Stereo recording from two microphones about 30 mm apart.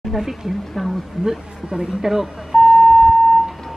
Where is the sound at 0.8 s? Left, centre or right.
Centre.